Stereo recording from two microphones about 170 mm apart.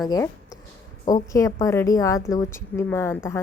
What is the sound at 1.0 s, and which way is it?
A woman's voice, 20° left (ahead or behind).